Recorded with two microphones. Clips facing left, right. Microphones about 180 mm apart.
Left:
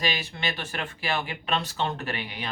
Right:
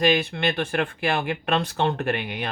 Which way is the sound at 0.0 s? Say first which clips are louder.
Right 9 dB; 55° right (ahead or behind).